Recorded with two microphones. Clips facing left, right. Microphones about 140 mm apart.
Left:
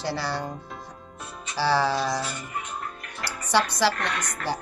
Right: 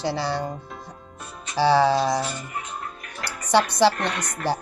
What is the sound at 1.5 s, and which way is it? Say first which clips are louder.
A woman's voice: right 5 dB; 20° right (ahead or behind).